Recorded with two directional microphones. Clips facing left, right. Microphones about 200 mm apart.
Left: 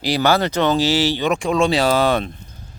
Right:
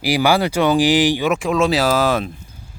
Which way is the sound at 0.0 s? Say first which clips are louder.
Right 1 dB; 10° right (ahead or behind).